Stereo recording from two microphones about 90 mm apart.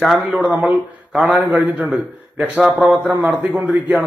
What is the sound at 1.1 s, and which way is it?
Speech, 5° right (ahead or behind).